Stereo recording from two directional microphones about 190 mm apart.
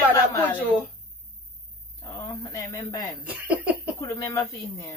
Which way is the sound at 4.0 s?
15° left (ahead or behind).